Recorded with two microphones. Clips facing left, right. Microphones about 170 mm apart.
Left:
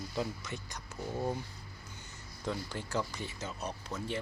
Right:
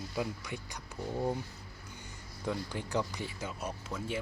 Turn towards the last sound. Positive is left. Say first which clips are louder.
# right 1 dB
turn(degrees=-10)  # may be behind; listen again after turning